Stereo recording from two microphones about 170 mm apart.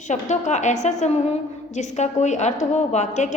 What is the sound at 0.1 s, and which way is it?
A woman's voice, 45° left (ahead or behind).